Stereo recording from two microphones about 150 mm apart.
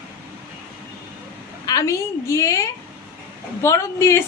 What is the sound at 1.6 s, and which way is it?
A woman's voice, 25° left (ahead or behind).